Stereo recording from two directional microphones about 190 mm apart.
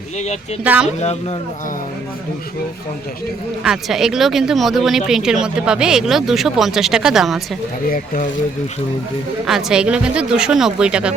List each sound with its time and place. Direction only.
0.6 s speech: 10° right (ahead or behind)
3.6 s speech: centre (ahead or behind)
7.9 s speech: 45° left (ahead or behind)
9.5 s speech: centre (ahead or behind)